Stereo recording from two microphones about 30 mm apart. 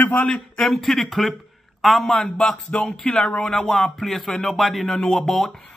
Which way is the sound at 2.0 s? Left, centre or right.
Left.